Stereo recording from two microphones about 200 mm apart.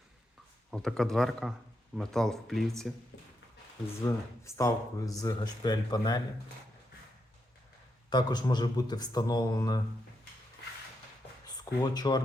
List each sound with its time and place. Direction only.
0.7 s speech: centre (ahead or behind)
4.0 s speech: 15° left (ahead or behind)
8.1 s speech: 20° left (ahead or behind)
11.5 s speech: 20° left (ahead or behind)